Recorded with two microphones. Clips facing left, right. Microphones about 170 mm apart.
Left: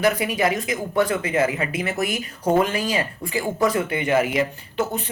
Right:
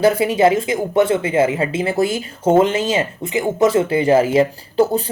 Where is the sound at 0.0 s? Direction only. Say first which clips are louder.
Right 7 dB; 25° right (ahead or behind).